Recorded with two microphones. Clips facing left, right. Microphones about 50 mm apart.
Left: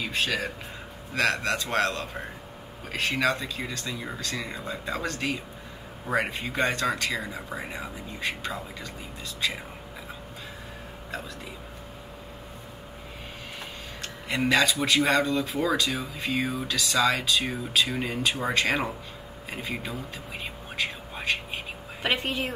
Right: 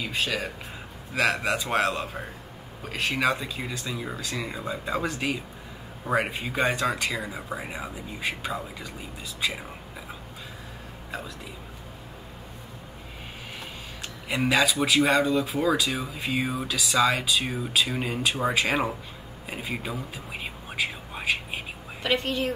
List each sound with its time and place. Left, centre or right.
0.1 s speech: centre
11.1 s speech: centre
14.3 s speech: centre
19.5 s a sound: centre
22.0 s a woman's voice: centre